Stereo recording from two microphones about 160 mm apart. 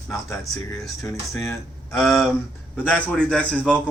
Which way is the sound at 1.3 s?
15° left (ahead or behind).